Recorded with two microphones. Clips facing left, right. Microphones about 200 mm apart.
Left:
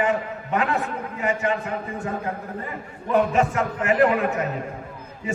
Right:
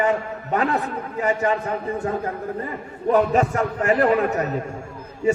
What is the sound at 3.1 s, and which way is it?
A man's voice, 40° right (ahead or behind).